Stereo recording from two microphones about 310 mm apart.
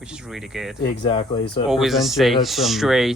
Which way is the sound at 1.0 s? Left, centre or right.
Centre.